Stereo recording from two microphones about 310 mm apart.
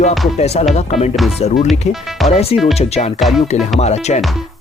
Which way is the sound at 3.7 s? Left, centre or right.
Left.